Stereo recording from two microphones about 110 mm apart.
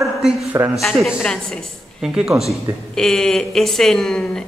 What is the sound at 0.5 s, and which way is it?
Speech, 25° right (ahead or behind).